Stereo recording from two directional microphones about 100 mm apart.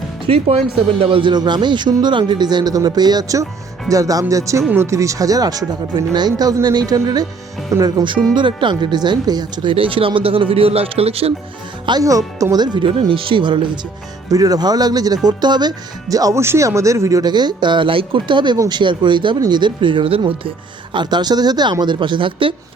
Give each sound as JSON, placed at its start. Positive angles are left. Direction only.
{"t": 0.3, "sound": "speech", "side_deg": -80}
{"t": 1.0, "sound": "speech", "side_deg": -60}
{"t": 8.4, "sound": "speech", "side_deg": -50}
{"t": 9.7, "sound": "speech", "side_deg": -65}
{"t": 11.9, "sound": "speech", "side_deg": -40}
{"t": 14.3, "sound": "speech", "side_deg": -35}
{"t": 18.5, "sound": "speech", "side_deg": -35}
{"t": 18.8, "sound": "speech", "side_deg": -50}
{"t": 20.9, "sound": "speech", "side_deg": -50}